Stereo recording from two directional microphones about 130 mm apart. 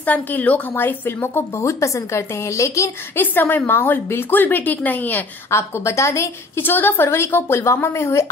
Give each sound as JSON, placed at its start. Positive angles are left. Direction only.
{"t": 0.0, "sound": "a woman's voice", "side_deg": 10}